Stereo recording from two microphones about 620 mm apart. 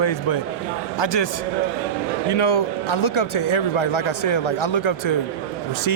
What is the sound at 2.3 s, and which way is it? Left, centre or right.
A man's voice, left.